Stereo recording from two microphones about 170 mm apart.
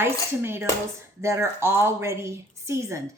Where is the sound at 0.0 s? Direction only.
15° right (ahead or behind).